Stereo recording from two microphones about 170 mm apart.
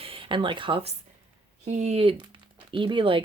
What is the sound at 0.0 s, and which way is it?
Speech, 30° right (ahead or behind).